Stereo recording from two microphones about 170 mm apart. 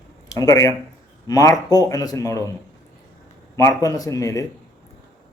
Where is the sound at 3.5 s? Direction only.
20° left (ahead or behind).